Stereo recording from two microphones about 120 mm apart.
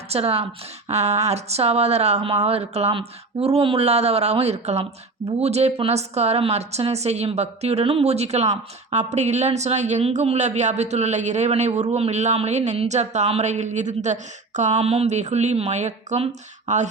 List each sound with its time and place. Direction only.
0.1 s speech: 55° right (ahead or behind); by 16.9 s 80° right